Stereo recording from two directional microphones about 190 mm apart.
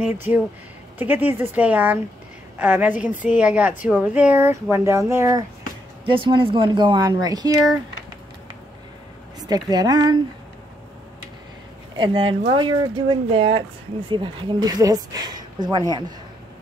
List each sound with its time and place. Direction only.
0.0 s speech: 10° right (ahead or behind)
6.0 s speech: 25° right (ahead or behind)
9.4 s speech: 20° right (ahead or behind)
12.0 s speech: 25° right (ahead or behind)